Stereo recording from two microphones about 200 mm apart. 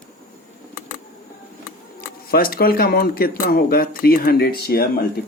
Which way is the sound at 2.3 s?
50° left (ahead or behind).